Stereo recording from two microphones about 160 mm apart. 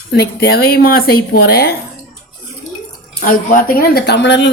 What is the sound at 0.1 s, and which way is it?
Speech, 90° left.